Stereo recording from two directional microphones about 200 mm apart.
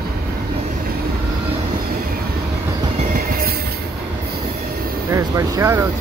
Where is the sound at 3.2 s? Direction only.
45° right (ahead or behind).